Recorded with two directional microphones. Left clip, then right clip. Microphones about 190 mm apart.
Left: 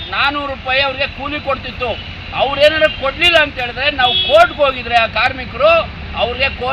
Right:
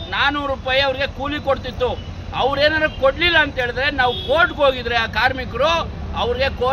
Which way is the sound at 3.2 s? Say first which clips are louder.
Left 4 dB; 30° right (ahead or behind).